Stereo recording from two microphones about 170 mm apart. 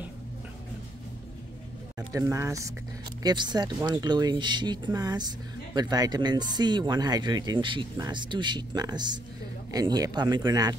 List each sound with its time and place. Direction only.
2.0 s speech: 20° right (ahead or behind)